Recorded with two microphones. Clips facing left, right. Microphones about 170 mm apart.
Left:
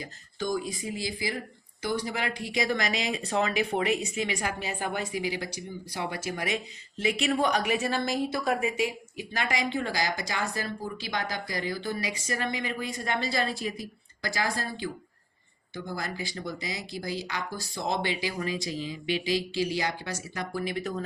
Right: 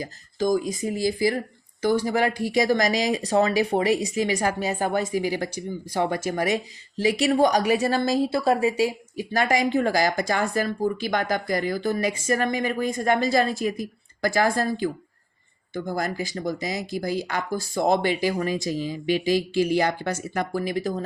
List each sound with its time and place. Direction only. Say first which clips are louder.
0.0 s a woman's voice: right 8 dB; 40° right (ahead or behind)